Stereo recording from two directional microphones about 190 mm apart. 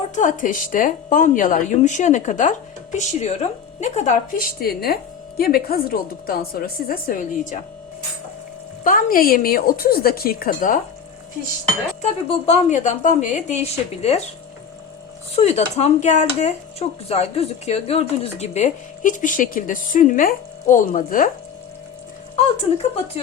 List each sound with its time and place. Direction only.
0.1 s a woman's voice: 45° left (ahead or behind)
8.8 s a woman's voice: 45° left (ahead or behind)
12.0 s a woman's voice: 35° left (ahead or behind)
15.4 s a woman's voice: 35° left (ahead or behind)
22.4 s a woman's voice: 35° left (ahead or behind)